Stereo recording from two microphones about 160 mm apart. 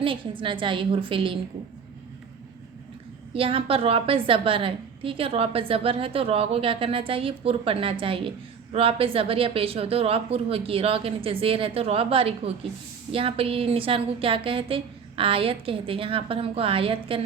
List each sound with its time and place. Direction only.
0.0 s a woman's voice: 30° right (ahead or behind)
3.3 s a woman's voice: 35° right (ahead or behind)